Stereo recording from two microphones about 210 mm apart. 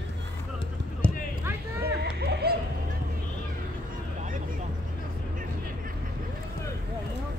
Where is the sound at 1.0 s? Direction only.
5° left (ahead or behind).